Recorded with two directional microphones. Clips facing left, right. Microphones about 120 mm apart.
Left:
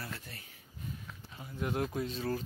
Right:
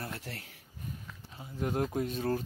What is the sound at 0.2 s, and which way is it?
Speech, 75° right (ahead or behind).